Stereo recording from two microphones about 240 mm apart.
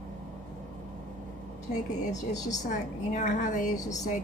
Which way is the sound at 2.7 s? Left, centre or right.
Left.